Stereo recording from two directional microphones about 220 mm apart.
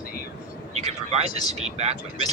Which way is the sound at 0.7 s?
30° right (ahead or behind).